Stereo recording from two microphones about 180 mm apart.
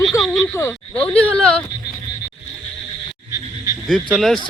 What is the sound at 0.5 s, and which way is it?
Speech, 10° left (ahead or behind).